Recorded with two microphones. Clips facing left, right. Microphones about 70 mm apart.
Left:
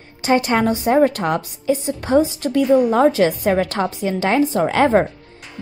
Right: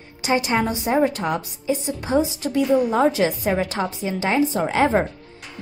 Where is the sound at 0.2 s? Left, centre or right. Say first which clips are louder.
Left 4 dB; left.